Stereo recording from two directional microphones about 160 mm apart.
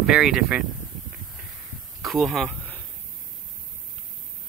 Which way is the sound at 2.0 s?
Centre (ahead or behind).